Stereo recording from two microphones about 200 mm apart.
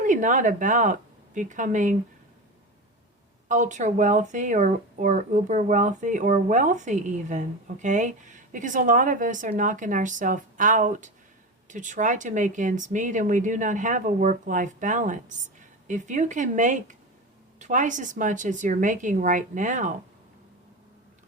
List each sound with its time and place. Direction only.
0.0 s speech: 40° right (ahead or behind)
3.5 s speech: 40° right (ahead or behind)